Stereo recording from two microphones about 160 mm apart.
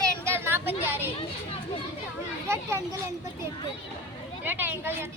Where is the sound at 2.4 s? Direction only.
15° right (ahead or behind).